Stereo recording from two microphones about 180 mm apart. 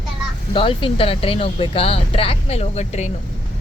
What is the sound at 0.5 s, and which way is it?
A child's voice, 30° left (ahead or behind).